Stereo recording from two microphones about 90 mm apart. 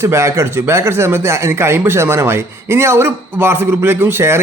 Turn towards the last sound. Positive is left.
turn(degrees=-25)  # may be behind; listen again after turning